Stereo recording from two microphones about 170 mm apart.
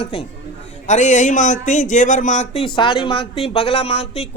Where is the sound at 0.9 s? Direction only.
45° left (ahead or behind).